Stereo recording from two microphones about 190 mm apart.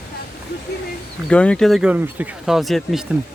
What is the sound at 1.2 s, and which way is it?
Speech, 5° left (ahead or behind).